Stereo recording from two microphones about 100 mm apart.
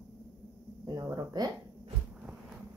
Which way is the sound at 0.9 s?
40° right (ahead or behind).